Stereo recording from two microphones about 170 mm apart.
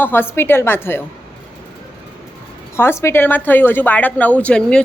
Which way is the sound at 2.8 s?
15° left (ahead or behind).